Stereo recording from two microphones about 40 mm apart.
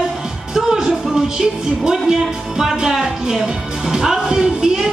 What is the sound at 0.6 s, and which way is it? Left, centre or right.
Music, centre.